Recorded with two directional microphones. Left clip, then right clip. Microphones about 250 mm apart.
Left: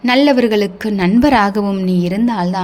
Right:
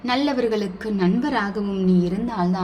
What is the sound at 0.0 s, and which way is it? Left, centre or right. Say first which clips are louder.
A woman's voice: left 10 dB; left.